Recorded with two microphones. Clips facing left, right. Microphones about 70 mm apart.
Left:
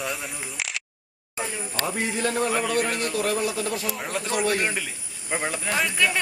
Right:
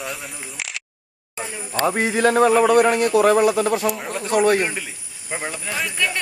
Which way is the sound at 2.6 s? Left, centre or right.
Right.